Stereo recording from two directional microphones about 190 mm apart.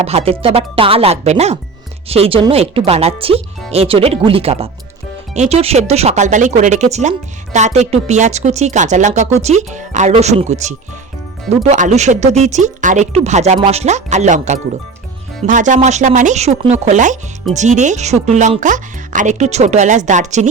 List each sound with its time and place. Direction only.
0.0 s speech: 30° right (ahead or behind)